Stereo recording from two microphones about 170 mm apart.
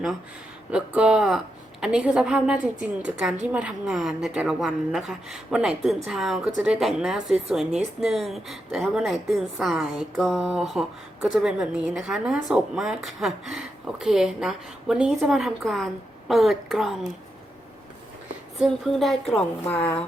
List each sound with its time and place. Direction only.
0.7 s a woman's voice: 5° right (ahead or behind)
18.5 s a woman's voice: centre (ahead or behind)